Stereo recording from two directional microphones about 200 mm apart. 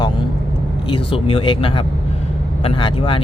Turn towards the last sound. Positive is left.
turn(degrees=25)  # may be behind; listen again after turning